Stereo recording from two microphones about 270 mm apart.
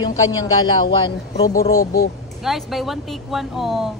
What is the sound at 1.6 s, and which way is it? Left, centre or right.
Speech, left.